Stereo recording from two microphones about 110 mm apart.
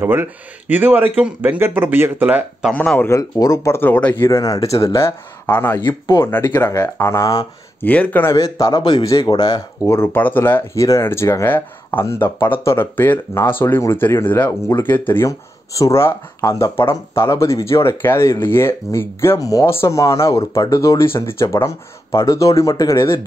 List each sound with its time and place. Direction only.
0.0 s speech: 20° right (ahead or behind)
2.7 s speech: 15° left (ahead or behind)
3.1 s speech: 30° left (ahead or behind)
4.6 s speech: 60° left (ahead or behind)
4.8 s speech: 25° left (ahead or behind)
7.8 s speech: 15° left (ahead or behind)
8.4 s speech: 35° left (ahead or behind)
9.8 s speech: 20° left (ahead or behind)